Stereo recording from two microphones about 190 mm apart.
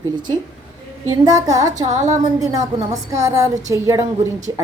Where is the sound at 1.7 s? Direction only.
40° right (ahead or behind).